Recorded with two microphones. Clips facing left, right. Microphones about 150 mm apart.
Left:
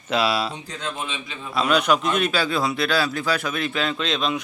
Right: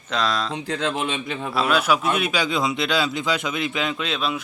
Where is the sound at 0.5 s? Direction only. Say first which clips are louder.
Right 6 dB; 90° right.